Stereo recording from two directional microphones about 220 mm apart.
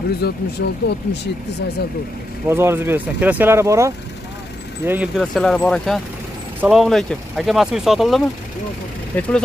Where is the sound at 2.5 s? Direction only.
10° right (ahead or behind).